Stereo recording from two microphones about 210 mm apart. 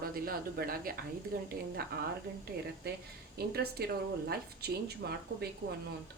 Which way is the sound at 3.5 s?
50° right (ahead or behind).